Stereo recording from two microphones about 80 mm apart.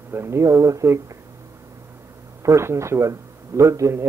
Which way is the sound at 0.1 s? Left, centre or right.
Right.